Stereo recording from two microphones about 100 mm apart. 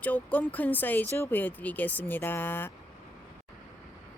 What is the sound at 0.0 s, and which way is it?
A woman's voice, 15° left (ahead or behind).